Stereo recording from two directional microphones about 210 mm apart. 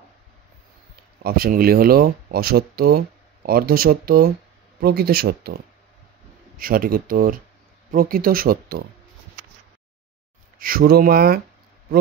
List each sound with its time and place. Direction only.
1.2 s speech: 45° right (ahead or behind)
6.6 s speech: 45° right (ahead or behind)
10.6 s speech: 45° right (ahead or behind)